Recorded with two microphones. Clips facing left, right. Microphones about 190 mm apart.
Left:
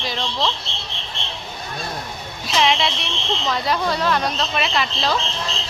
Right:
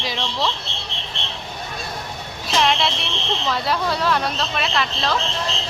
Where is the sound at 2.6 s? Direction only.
Centre (ahead or behind).